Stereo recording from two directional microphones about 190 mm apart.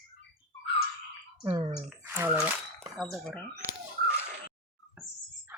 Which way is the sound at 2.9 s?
Centre (ahead or behind).